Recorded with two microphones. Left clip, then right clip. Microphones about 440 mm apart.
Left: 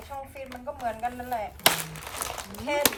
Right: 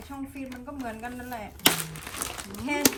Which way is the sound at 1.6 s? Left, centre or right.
Centre.